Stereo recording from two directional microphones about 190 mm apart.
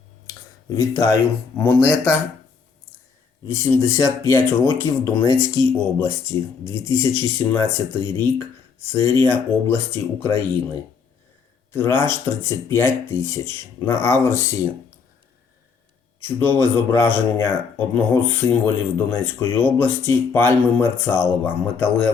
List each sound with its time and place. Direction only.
0.3 s a sound: 15° left (ahead or behind)
1.5 s speech: 10° left (ahead or behind)
3.4 s speech: 15° left (ahead or behind)
11.7 s speech: 10° left (ahead or behind)
16.2 s speech: 10° left (ahead or behind)